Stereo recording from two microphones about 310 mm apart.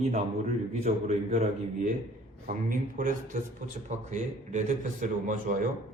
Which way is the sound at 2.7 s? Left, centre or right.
Right.